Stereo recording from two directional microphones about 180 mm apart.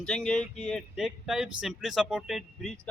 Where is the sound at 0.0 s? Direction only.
5° left (ahead or behind).